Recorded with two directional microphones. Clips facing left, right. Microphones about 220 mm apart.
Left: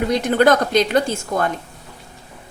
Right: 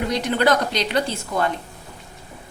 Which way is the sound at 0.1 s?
50° left (ahead or behind).